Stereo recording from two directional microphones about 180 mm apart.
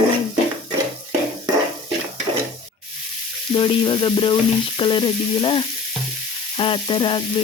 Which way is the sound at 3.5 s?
25° left (ahead or behind).